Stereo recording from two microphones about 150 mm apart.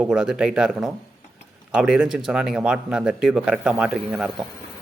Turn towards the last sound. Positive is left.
turn(degrees=0)  # may be behind; listen again after turning